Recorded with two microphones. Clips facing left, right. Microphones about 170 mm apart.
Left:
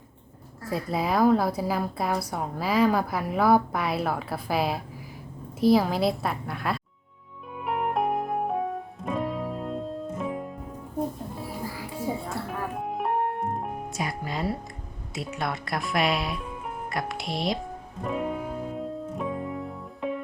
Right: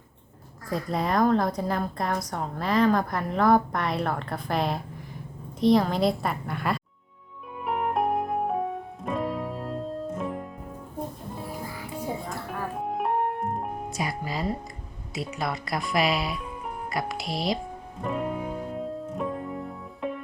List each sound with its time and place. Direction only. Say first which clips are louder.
0.7 s a woman's voice: even; 5° left (ahead or behind)
7.6 s music: even; centre (ahead or behind)
11.9 s music: left 2 dB; centre (ahead or behind)
15.1 s a woman's voice: right 1 dB; centre (ahead or behind)
18.0 s music: even; centre (ahead or behind)